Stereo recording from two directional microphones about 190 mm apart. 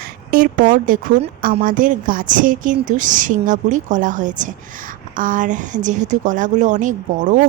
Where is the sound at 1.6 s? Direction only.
45° right (ahead or behind).